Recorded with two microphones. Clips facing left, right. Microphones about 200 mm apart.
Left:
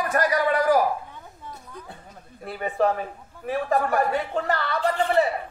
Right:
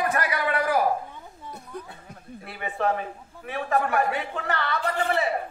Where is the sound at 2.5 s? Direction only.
40° left (ahead or behind).